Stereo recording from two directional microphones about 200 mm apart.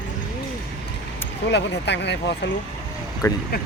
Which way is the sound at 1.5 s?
60° left (ahead or behind).